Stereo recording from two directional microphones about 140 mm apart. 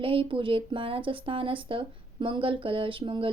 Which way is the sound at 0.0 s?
40° right (ahead or behind).